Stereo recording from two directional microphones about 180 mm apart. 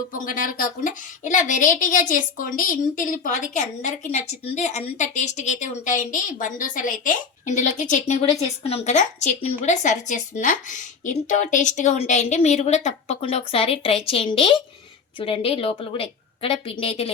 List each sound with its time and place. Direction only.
0.1 s a woman's voice: 50° left (ahead or behind); by 17.1 s 30° left (ahead or behind)